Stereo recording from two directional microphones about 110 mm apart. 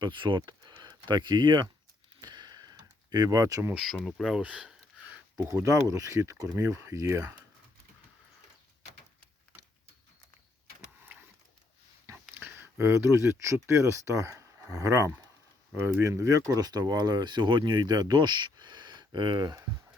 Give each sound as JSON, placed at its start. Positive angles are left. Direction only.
{"t": 0.0, "sound": "speech", "side_deg": -45}
{"t": 2.2, "sound": "a sound", "side_deg": -40}
{"t": 3.9, "sound": "speech", "side_deg": 0}
{"t": 5.5, "sound": "speech", "side_deg": -30}
{"t": 11.0, "sound": "a sound", "side_deg": -20}
{"t": 12.3, "sound": "speech", "side_deg": -20}